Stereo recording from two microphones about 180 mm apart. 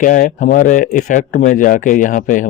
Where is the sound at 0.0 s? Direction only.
45° left (ahead or behind).